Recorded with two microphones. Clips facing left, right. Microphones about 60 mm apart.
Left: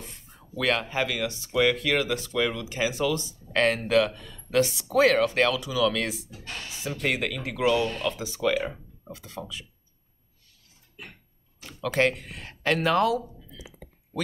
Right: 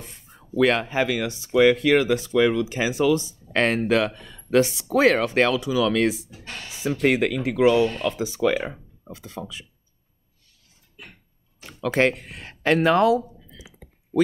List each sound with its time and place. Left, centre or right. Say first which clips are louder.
0.0 s speech: right 1 dB; right
11.6 s speech: right 3 dB; right